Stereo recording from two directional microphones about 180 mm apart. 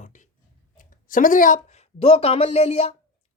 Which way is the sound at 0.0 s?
45° left (ahead or behind).